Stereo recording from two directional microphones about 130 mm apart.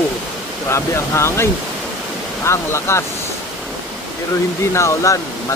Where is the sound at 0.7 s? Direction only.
20° left (ahead or behind).